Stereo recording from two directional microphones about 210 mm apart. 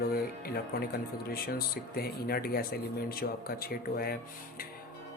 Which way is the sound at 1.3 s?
45° left (ahead or behind).